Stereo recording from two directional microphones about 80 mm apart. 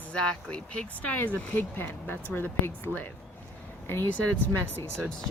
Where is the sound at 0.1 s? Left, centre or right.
Centre; by 4.2 s left.